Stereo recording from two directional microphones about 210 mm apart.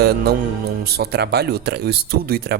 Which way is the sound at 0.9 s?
50° right (ahead or behind).